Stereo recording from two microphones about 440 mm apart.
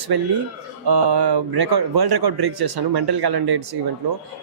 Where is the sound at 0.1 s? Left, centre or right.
Right.